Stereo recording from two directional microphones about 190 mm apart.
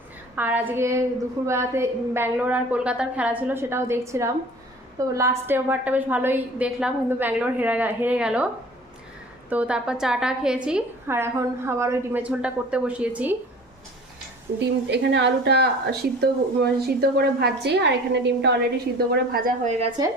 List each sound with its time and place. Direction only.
0.3 s a woman's voice: 10° right (ahead or behind)
9.5 s a woman's voice: 5° right (ahead or behind)
14.8 s a woman's voice: 65° right (ahead or behind)
18.9 s speech: 55° right (ahead or behind)